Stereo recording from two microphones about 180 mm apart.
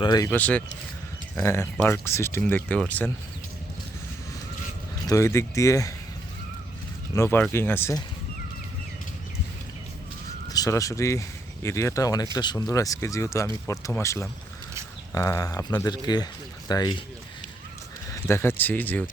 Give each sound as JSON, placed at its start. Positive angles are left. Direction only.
{"t": 0.0, "sound": "speech", "side_deg": 20}
{"t": 0.3, "sound": "speech", "side_deg": 5}
{"t": 5.0, "sound": "speech", "side_deg": 15}
{"t": 7.2, "sound": "speech", "side_deg": 10}
{"t": 10.5, "sound": "speech", "side_deg": 20}
{"t": 18.1, "sound": "speech", "side_deg": 15}